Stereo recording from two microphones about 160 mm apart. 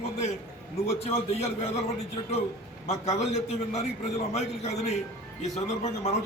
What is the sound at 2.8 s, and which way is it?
A man's voice, 45° left (ahead or behind).